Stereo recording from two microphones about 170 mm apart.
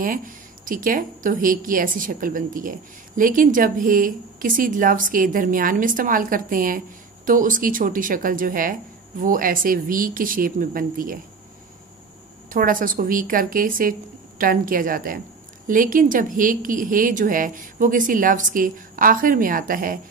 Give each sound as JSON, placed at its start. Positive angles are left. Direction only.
{"t": 0.0, "sound": "speech", "side_deg": -55}
{"t": 12.4, "sound": "speech", "side_deg": -55}